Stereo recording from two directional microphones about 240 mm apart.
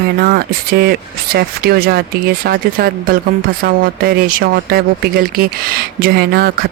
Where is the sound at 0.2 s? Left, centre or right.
Right.